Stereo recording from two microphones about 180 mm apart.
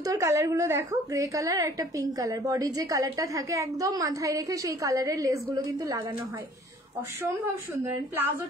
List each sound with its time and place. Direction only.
0.0 s a woman's voice: 20° right (ahead or behind)